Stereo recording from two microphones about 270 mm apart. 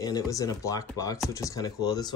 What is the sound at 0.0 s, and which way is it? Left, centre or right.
Speech, centre.